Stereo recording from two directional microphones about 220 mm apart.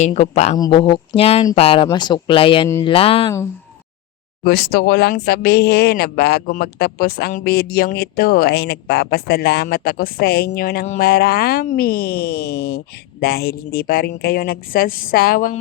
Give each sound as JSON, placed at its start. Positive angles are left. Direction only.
{"t": 0.0, "sound": "speech", "side_deg": 30}
{"t": 2.6, "sound": "speech", "side_deg": 10}
{"t": 2.9, "sound": "speech", "side_deg": 25}
{"t": 4.4, "sound": "speech", "side_deg": 45}